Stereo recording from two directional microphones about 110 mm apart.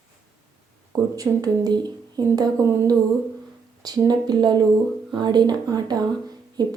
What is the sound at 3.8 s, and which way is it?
A woman's voice, 35° right (ahead or behind).